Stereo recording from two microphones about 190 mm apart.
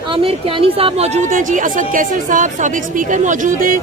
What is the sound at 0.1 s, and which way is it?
Speech, 30° right (ahead or behind).